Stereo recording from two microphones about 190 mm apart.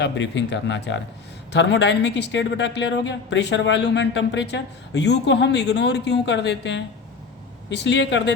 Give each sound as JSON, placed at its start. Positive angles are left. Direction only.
{"t": 0.0, "sound": "speech", "side_deg": 70}